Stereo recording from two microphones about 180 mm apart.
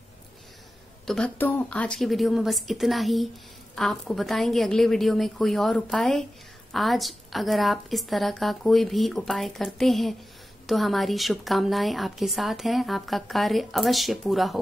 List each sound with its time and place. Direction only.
1.0 s a woman's voice: 5° left (ahead or behind)